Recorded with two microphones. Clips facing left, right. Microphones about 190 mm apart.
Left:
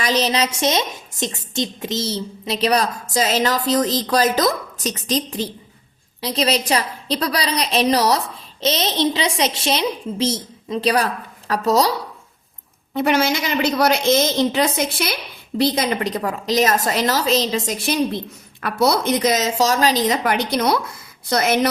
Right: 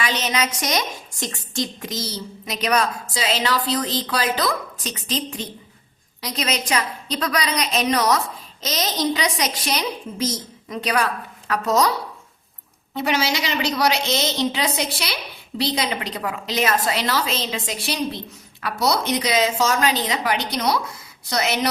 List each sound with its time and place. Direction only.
0.0 s a woman's voice: 35° left (ahead or behind)
13.0 s a woman's voice: 50° left (ahead or behind)